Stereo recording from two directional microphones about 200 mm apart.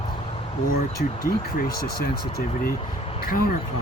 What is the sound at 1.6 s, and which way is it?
Speech, 45° left (ahead or behind).